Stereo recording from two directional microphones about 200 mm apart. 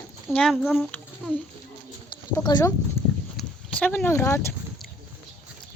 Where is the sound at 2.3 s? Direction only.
20° left (ahead or behind).